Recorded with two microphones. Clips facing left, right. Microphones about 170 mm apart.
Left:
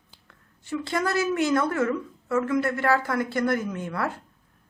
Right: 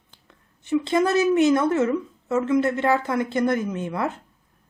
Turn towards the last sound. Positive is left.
turn(degrees=-20)  # may be behind; listen again after turning